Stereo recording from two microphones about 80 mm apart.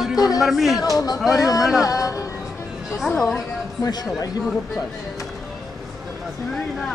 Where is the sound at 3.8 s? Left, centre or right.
Left.